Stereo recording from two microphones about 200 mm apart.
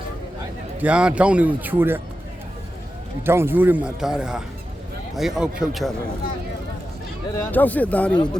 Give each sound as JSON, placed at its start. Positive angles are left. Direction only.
{"t": 0.8, "sound": "speech", "side_deg": -5}
{"t": 3.2, "sound": "speech", "side_deg": -10}
{"t": 7.3, "sound": "a man's voice", "side_deg": 10}
{"t": 8.1, "sound": "speech", "side_deg": 20}